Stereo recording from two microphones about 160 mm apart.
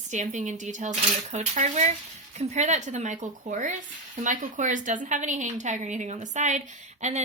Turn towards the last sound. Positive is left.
turn(degrees=-45)  # may be behind; listen again after turning